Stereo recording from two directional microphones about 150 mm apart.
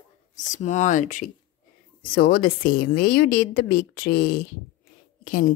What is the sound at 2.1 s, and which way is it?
Speech, 80° left.